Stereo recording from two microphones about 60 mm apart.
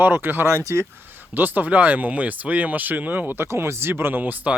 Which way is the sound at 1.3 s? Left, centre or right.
Right.